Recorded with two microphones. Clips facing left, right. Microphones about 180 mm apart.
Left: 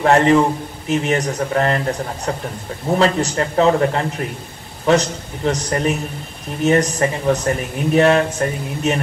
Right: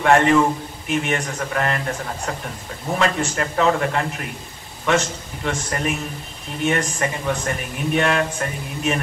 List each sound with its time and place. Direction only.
0.0 s speech: 35° left (ahead or behind)